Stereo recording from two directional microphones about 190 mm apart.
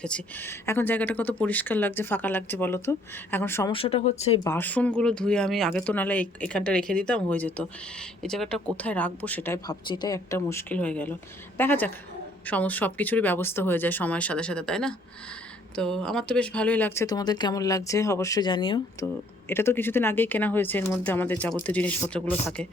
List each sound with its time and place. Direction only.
0.0 s speech: 10° left (ahead or behind)
3.7 s speech: 30° left (ahead or behind)
4.4 s speech: 10° left (ahead or behind)
9.8 s speech: 25° left (ahead or behind)
19.5 s speech: 10° left (ahead or behind)